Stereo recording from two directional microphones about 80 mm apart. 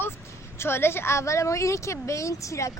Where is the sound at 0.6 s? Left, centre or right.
Left.